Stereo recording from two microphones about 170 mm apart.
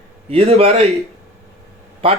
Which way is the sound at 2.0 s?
35° right (ahead or behind).